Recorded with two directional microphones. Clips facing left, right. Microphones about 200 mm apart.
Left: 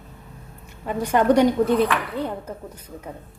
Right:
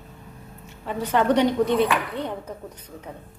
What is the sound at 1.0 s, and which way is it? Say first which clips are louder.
Speech: left 3 dB; 10° left (ahead or behind).